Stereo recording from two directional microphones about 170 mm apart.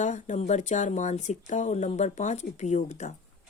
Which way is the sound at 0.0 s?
45° left (ahead or behind).